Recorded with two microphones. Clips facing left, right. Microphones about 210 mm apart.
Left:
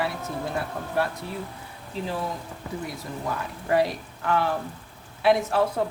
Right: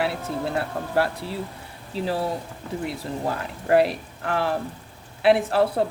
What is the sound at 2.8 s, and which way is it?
Speech, 30° right (ahead or behind).